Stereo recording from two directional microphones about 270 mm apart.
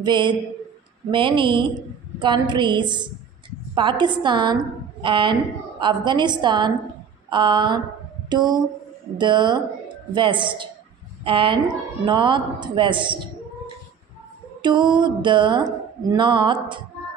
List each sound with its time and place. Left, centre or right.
0.0 s a woman's voice: centre
14.6 s a woman's voice: centre